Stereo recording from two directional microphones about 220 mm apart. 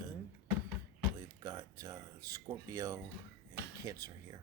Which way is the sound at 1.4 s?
15° right (ahead or behind).